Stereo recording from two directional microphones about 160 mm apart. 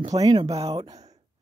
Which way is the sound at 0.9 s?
45° right (ahead or behind).